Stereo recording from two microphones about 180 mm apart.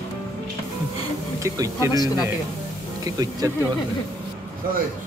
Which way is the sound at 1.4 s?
15° right (ahead or behind).